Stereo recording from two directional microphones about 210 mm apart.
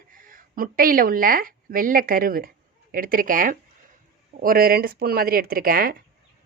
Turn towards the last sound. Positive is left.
turn(degrees=-45)  # may be behind; listen again after turning